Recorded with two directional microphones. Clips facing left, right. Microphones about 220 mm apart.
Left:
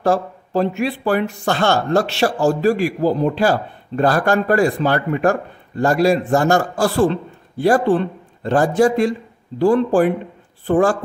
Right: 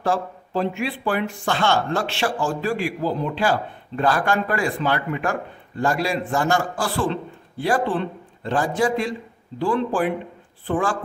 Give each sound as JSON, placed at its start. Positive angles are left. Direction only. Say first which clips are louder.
{"t": 0.0, "sound": "a man's voice", "louder": "left 5 dB", "side_deg": 40}